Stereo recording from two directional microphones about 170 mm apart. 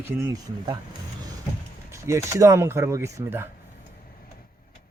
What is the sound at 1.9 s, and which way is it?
Speech, 15° right (ahead or behind).